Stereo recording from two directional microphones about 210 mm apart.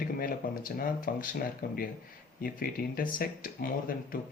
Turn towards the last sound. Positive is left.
turn(degrees=40)  # may be behind; listen again after turning